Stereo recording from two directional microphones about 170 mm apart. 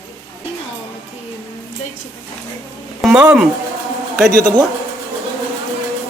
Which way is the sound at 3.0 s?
5° right (ahead or behind).